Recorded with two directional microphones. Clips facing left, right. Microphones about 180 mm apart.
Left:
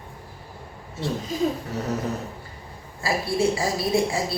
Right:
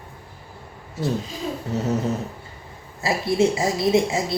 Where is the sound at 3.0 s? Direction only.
20° right (ahead or behind).